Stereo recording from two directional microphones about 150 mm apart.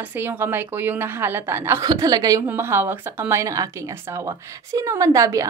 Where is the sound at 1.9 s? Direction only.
25° right (ahead or behind).